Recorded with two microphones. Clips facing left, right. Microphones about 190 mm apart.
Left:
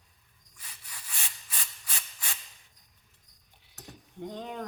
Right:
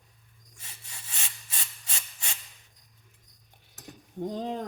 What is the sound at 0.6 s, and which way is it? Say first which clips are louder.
Rub: even; 25° right (ahead or behind).